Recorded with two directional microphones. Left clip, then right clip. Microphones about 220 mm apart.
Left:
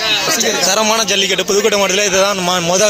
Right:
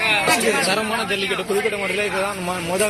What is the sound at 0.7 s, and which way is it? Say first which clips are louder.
A man's voice: left 8 dB; 45° left (ahead or behind).